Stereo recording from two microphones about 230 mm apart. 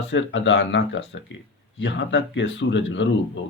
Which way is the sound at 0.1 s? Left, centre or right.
Left.